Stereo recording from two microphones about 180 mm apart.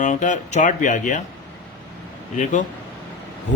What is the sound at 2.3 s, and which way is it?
Speech, 45° left (ahead or behind).